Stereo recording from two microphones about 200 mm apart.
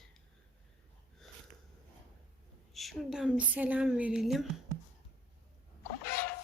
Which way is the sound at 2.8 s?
Centre (ahead or behind).